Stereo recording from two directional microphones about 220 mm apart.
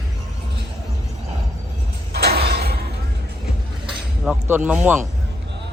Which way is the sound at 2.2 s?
45° right (ahead or behind).